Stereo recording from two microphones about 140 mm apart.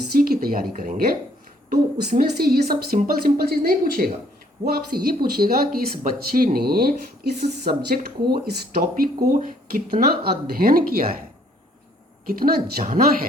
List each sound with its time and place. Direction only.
0.1 s a sound: 90° right
0.8 s speech: 90° right
10.1 s speech: 90° right
12.2 s speech: 90° right